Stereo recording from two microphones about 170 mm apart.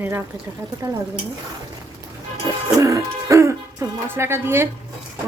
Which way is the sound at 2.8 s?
20° right (ahead or behind).